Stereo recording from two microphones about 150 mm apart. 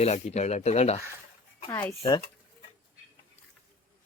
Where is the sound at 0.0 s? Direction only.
45° left (ahead or behind).